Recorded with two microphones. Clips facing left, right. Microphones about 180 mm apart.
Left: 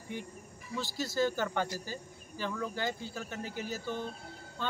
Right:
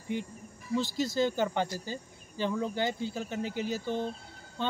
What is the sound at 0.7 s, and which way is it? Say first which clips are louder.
Speech: right 4 dB; 20° right (ahead or behind).